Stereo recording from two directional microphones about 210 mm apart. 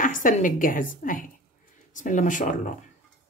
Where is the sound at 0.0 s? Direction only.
40° left (ahead or behind).